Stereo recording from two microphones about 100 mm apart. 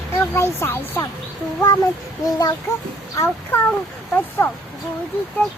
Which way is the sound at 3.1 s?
25° left (ahead or behind).